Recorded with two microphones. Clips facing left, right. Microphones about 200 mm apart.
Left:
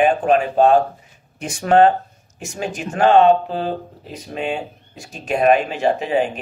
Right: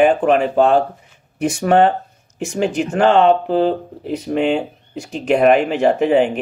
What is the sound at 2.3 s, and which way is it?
Speech, 65° right (ahead or behind).